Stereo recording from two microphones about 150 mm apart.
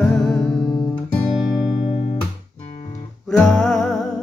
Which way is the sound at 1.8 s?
45° left (ahead or behind).